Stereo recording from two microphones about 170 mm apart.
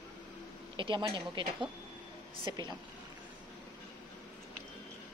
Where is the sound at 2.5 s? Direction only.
25° right (ahead or behind).